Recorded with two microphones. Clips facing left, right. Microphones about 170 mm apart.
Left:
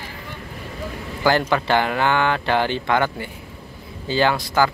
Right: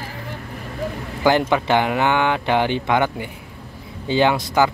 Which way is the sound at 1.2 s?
20° right (ahead or behind).